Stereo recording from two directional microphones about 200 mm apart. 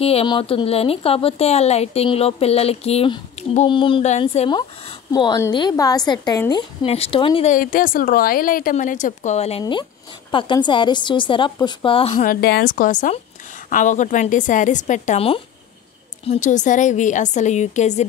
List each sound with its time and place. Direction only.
0.0 s a woman's voice: 30° left (ahead or behind)
7.5 s a woman's voice: 45° left (ahead or behind); by 12.2 s 30° left (ahead or behind)
12.2 s a woman's voice: 50° left (ahead or behind)